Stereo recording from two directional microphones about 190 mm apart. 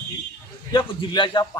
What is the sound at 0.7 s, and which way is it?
Speech, 25° left (ahead or behind).